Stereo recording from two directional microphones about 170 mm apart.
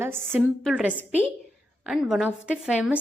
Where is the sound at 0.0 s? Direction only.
15° right (ahead or behind).